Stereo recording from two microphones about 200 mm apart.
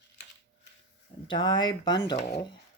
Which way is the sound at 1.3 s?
20° left (ahead or behind).